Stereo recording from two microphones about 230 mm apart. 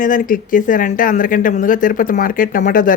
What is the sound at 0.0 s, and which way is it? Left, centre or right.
Speech, left.